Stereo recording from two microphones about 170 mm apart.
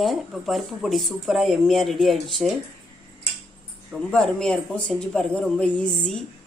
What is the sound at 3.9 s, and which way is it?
Speech, centre (ahead or behind).